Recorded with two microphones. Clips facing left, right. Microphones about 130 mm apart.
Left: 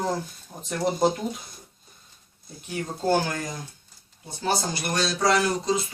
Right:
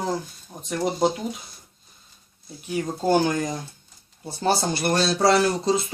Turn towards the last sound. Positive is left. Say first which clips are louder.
# right 3 dB
turn(degrees=-30)  # may be behind; listen again after turning